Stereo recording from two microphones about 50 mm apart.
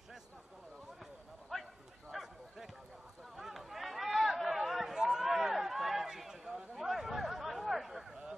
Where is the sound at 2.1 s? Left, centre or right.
Centre.